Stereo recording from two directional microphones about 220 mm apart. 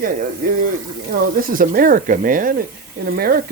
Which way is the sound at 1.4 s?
40° right (ahead or behind).